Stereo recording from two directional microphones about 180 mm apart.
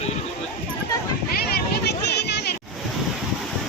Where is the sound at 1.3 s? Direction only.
60° left (ahead or behind).